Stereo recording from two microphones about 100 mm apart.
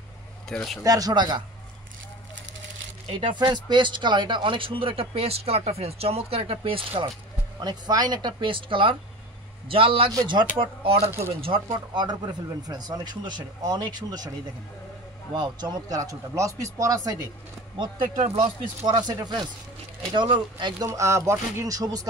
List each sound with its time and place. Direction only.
0.5 s speech: 5° left (ahead or behind)
0.8 s speech: 40° right (ahead or behind)
3.1 s speech: 60° right (ahead or behind)
7.6 s speech: 40° right (ahead or behind); by 11.6 s 65° right (ahead or behind)
11.9 s speech: 45° right (ahead or behind)
15.3 s speech: 45° right (ahead or behind)
17.7 s speech: 55° right (ahead or behind)
18.9 s speech: 45° right (ahead or behind)
20.8 s speech: 30° right (ahead or behind)